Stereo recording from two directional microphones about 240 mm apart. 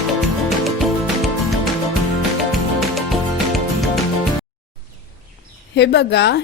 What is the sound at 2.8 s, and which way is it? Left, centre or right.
Music, centre.